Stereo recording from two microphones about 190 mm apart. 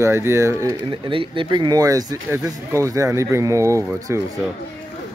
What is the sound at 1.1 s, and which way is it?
Speech, 25° right (ahead or behind).